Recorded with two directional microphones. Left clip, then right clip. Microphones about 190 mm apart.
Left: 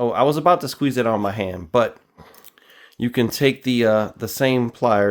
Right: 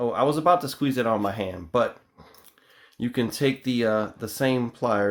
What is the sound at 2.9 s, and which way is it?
Speech, 45° left (ahead or behind).